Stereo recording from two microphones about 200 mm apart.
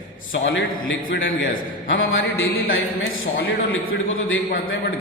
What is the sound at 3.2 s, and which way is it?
Speech, 45° left (ahead or behind).